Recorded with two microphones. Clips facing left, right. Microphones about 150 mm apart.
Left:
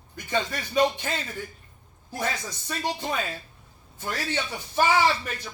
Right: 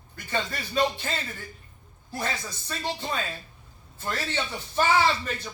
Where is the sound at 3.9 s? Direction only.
15° left (ahead or behind).